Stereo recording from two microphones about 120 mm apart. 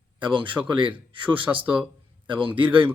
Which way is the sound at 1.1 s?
45° right (ahead or behind).